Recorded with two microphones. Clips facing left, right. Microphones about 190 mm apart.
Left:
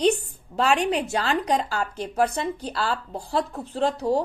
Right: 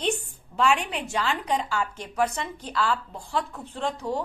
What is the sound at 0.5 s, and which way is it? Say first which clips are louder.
A woman's voice: left 3 dB; 35° left (ahead or behind).